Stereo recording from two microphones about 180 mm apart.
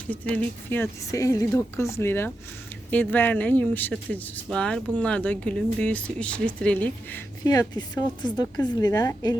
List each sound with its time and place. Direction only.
0.3 s speech: 10° left (ahead or behind)
7.4 s a woman's voice: 20° left (ahead or behind)